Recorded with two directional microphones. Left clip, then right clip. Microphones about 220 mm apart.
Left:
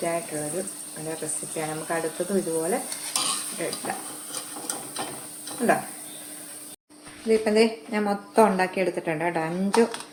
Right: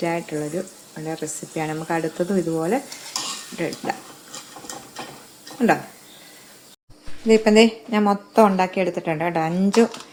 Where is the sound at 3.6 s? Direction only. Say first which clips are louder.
Right 6 dB; 45° right (ahead or behind).